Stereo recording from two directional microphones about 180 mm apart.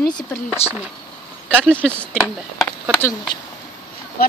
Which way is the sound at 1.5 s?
10° right (ahead or behind).